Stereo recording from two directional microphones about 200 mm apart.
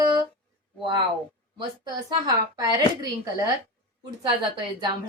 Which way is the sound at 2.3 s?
20° right (ahead or behind).